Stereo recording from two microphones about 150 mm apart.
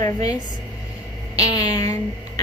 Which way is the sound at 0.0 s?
25° left (ahead or behind).